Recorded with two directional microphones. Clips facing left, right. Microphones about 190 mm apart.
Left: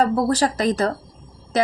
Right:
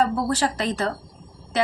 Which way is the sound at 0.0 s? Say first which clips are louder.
Left 3 dB; 40° left (ahead or behind).